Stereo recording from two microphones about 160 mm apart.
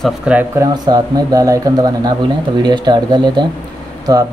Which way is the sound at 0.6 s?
25° right (ahead or behind).